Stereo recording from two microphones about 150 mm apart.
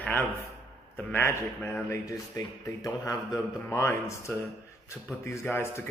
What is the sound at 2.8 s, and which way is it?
Speech, 20° left (ahead or behind).